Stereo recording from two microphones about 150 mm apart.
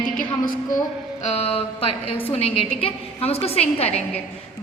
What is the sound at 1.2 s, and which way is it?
A woman's voice, 45° left (ahead or behind).